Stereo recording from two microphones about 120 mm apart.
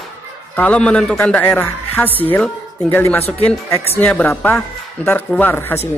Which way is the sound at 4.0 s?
10° left (ahead or behind).